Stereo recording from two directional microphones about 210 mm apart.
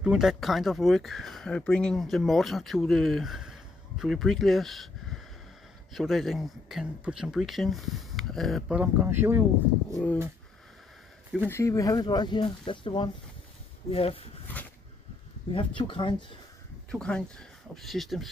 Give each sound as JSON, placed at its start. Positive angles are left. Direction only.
{"t": 0.0, "sound": "speech", "side_deg": 0}
{"t": 9.8, "sound": "speech", "side_deg": 0}
{"t": 11.3, "sound": "speech", "side_deg": 10}
{"t": 15.5, "sound": "speech", "side_deg": 25}
{"t": 16.9, "sound": "speech", "side_deg": 5}